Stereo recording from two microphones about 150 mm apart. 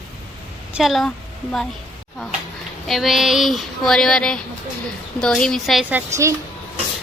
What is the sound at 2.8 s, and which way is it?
Speech, centre (ahead or behind).